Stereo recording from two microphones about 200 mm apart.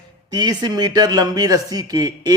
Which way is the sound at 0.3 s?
20° right (ahead or behind).